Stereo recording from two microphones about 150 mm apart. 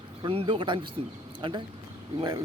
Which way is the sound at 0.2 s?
35° right (ahead or behind).